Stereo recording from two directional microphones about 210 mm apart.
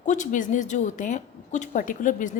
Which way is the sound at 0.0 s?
35° left (ahead or behind).